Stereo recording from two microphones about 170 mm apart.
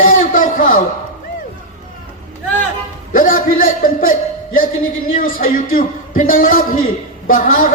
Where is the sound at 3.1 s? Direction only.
55° left (ahead or behind).